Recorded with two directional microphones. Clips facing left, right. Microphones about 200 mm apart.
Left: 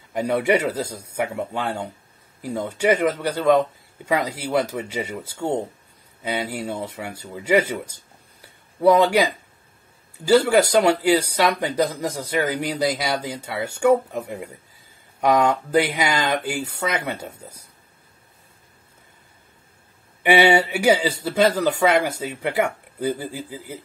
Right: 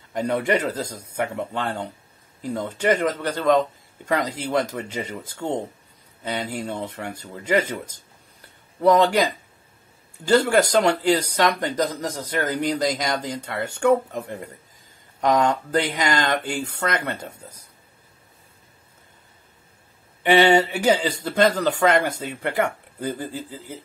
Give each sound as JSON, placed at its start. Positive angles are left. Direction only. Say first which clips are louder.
{"t": 0.1, "sound": "speech", "louder": "left 2 dB", "side_deg": 10}
{"t": 20.2, "sound": "speech", "louder": "even", "side_deg": 10}